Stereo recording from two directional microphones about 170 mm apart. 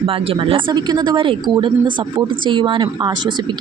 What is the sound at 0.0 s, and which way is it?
Speech, 30° right (ahead or behind).